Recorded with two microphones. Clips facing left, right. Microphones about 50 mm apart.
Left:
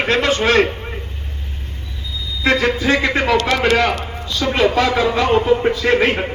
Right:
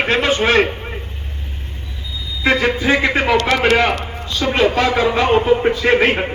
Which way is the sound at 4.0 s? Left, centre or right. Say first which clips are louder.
Even; centre.